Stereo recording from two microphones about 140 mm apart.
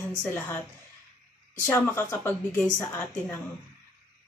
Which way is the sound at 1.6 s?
15° left (ahead or behind).